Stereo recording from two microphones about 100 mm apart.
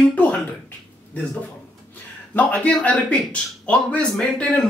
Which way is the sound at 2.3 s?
15° left (ahead or behind).